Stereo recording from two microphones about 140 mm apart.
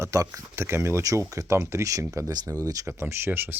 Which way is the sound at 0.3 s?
20° right (ahead or behind).